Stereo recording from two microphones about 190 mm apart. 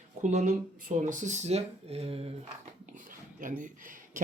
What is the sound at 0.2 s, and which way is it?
Speech, 40° right (ahead or behind).